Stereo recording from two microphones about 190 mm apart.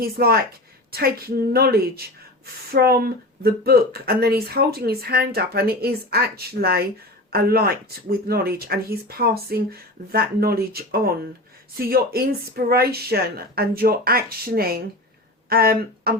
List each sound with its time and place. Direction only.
0.0 s speech: 55° right (ahead or behind)
0.9 s a sound: 55° right (ahead or behind)
1.5 s speech: 55° right (ahead or behind)